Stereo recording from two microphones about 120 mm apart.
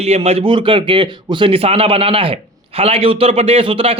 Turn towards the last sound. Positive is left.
turn(degrees=-50)  # may be behind; listen again after turning